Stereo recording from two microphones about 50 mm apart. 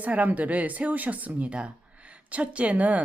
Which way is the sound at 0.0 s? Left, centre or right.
Right.